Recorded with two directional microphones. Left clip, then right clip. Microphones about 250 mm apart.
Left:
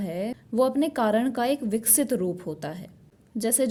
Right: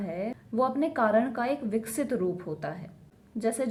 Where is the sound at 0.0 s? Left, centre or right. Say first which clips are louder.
Left 3 dB; left.